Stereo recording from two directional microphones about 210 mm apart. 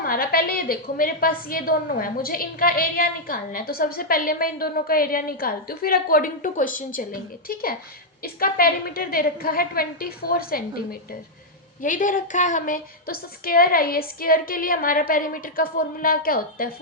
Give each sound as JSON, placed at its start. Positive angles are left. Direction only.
{"t": 0.0, "sound": "a woman's voice", "side_deg": 45}